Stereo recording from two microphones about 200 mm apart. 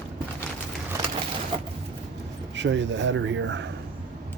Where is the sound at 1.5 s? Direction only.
25° right (ahead or behind).